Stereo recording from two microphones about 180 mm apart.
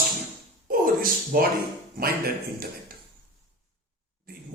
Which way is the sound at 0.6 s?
55° right (ahead or behind).